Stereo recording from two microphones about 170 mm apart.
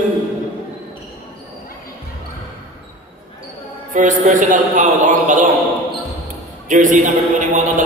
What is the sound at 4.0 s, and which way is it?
A man's voice, 50° right (ahead or behind).